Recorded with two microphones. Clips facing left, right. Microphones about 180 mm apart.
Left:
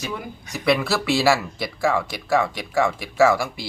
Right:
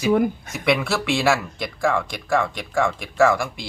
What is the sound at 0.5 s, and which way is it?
Speech, centre (ahead or behind).